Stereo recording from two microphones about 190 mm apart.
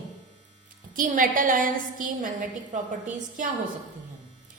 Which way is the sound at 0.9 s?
45° right (ahead or behind).